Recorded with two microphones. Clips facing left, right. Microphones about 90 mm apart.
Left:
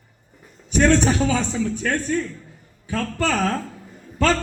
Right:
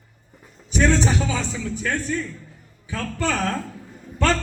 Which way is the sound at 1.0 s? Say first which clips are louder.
Left 3 dB; 20° left (ahead or behind).